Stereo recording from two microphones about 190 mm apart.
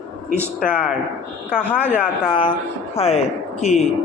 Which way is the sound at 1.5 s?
5° left (ahead or behind).